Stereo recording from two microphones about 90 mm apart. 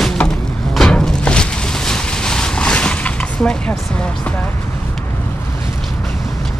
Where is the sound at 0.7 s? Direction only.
5° left (ahead or behind).